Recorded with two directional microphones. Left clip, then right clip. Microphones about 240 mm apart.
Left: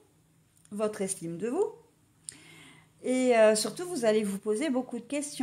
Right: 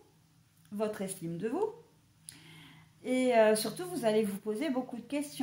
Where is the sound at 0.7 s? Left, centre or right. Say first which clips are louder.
Left 4 dB; left.